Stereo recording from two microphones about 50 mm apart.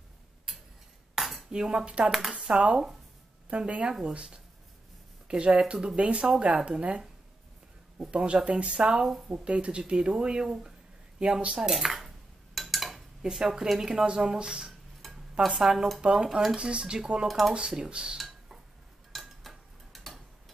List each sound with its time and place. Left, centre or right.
1.1 s cutlery: centre
1.5 s speech: centre
2.0 s speech: centre
2.3 s speech: centre
8.0 s speech: right; by 12.1 s centre
12.5 s a sound: centre
13.2 s speech: centre
17.3 s speech: centre
17.6 s speech: centre
18.1 s dishes: centre
19.1 s tick-tock: centre